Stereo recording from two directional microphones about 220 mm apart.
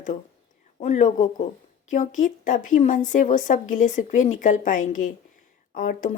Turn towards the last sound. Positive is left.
turn(degrees=35)  # may be behind; listen again after turning